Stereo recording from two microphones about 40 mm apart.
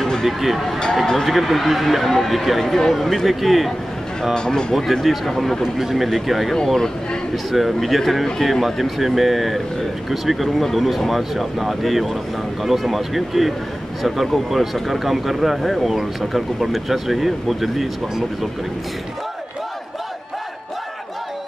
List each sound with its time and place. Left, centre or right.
0.0 s a sound: centre
0.4 s speech: centre
1.0 s speech: centre
1.3 s speech: centre
2.6 s speech: centre
4.2 s speech: centre
5.0 s speech: centre
7.5 s speech: centre